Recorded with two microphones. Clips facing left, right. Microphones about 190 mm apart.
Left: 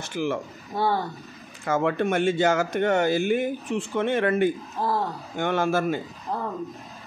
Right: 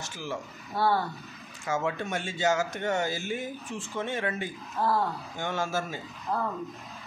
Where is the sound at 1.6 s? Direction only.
60° left (ahead or behind).